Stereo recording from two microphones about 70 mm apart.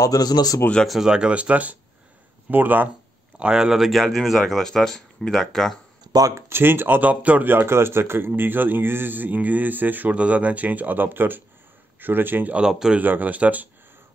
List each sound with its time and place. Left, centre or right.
0.0 s a man's voice: left
0.8 s speech: centre; by 2.9 s right
3.3 s speech: centre
6.1 s speech: right
6.5 s speech: right
12.5 s speech: centre
13.0 s speech: right